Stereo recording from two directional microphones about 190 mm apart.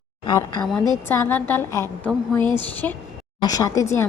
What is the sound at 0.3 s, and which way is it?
A woman's voice, 20° left (ahead or behind).